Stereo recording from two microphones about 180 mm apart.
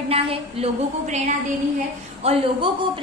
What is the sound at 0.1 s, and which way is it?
A woman's voice, 35° right (ahead or behind).